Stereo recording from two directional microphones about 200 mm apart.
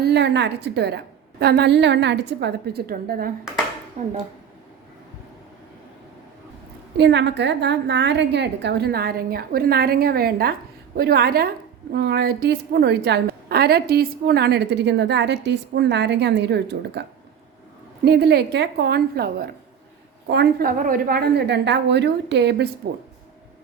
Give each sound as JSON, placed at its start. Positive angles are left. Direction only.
{"t": 0.0, "sound": "a woman's voice", "side_deg": -55}
{"t": 4.0, "sound": "speech", "side_deg": -35}
{"t": 6.9, "sound": "a woman's voice", "side_deg": -60}